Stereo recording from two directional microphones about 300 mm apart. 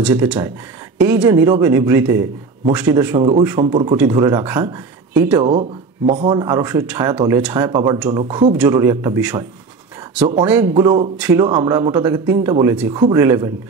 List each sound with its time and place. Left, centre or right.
0.0 s speech: centre
5.5 s speech: right